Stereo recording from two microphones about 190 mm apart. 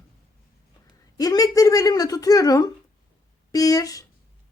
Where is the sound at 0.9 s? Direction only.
20° left (ahead or behind).